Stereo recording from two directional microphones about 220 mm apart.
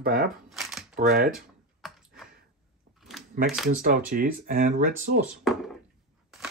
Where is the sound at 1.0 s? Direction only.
40° right (ahead or behind).